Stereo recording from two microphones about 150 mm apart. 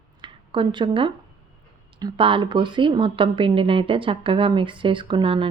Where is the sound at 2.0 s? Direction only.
35° right (ahead or behind).